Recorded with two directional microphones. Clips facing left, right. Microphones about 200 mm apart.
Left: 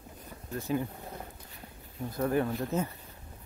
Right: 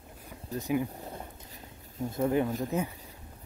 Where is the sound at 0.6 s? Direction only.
15° right (ahead or behind).